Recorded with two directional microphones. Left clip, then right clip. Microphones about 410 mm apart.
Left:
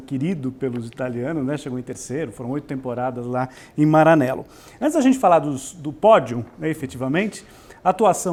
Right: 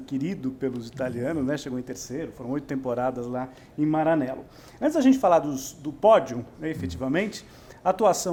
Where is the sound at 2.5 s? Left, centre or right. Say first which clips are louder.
Right 1 dB; centre.